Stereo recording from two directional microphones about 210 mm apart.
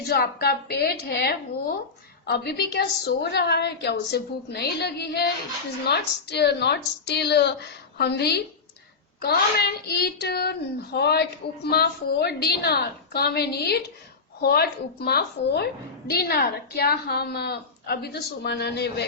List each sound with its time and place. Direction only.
0.1 s a woman's voice: 50° left (ahead or behind)